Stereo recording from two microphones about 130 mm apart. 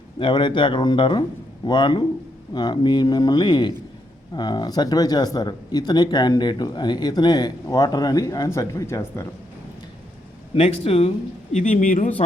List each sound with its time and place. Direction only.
0.2 s speech: 40° left (ahead or behind); by 9.2 s 20° left (ahead or behind)
10.5 s speech: 50° left (ahead or behind)
11.5 s speech: 80° left